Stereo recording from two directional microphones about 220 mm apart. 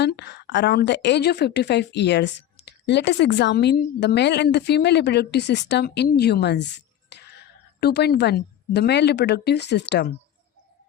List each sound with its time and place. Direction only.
0.0 s a woman's voice: 50° left (ahead or behind)